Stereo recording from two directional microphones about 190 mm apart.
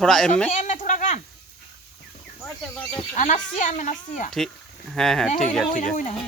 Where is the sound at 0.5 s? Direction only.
40° left (ahead or behind).